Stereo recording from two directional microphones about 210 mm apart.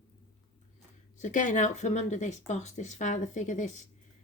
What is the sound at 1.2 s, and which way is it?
Speech, 35° left (ahead or behind).